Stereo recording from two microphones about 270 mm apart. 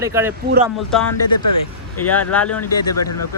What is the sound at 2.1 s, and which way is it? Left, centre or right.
Speech, centre.